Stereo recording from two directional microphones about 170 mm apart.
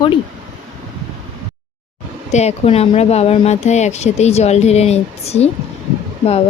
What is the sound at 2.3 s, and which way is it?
Speech, 40° left (ahead or behind).